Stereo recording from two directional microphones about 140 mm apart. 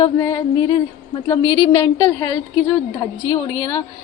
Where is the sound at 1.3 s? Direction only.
30° left (ahead or behind).